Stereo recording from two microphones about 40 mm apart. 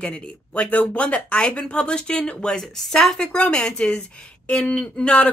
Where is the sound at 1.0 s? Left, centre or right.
Left.